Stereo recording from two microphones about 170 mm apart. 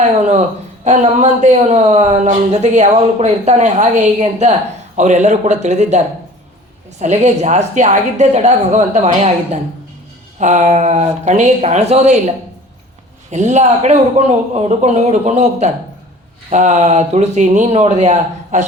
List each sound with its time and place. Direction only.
0.0 s a woman's voice: 40° right (ahead or behind)
7.0 s a woman's voice: 40° right (ahead or behind)
13.3 s a woman's voice: 45° right (ahead or behind)